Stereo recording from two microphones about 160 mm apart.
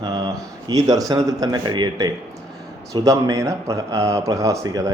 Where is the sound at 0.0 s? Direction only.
25° right (ahead or behind).